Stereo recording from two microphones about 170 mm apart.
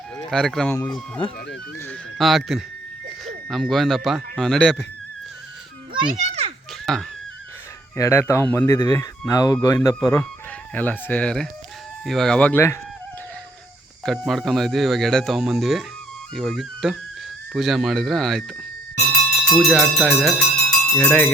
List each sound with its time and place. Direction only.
0.3 s speech: centre (ahead or behind)
2.1 s speech: centre (ahead or behind)
6.1 s a child's voice: 40° right (ahead or behind)
6.9 s speech: 5° left (ahead or behind)
7.9 s speech: 15° left (ahead or behind)
14.0 s speech: centre (ahead or behind)
19.5 s speech: 5° left (ahead or behind)